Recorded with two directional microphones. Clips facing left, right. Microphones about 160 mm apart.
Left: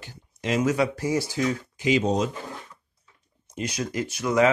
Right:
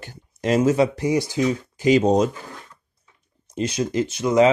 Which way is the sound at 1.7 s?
40° right (ahead or behind).